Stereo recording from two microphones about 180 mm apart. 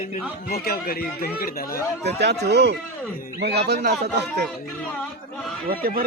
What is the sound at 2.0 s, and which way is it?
Speech, 65° right (ahead or behind).